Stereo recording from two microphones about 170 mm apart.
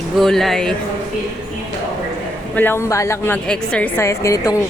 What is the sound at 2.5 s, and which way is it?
A woman's voice, 10° left (ahead or behind).